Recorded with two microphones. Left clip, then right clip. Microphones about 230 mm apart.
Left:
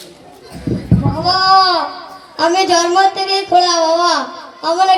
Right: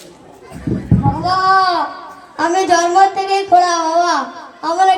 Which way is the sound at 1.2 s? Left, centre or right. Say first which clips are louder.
Left 3 dB; right.